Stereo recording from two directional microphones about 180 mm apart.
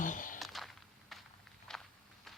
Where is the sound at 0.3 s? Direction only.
Centre (ahead or behind).